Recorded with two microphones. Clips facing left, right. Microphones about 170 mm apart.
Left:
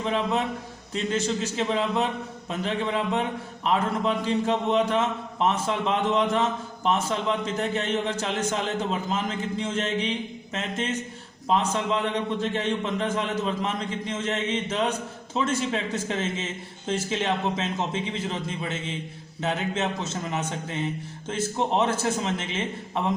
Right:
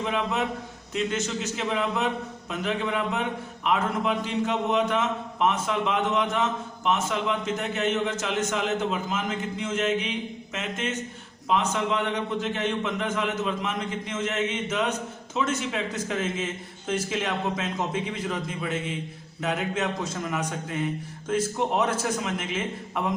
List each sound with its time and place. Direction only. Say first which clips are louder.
0.0 s a man's voice: left 1 dB; 30° left (ahead or behind)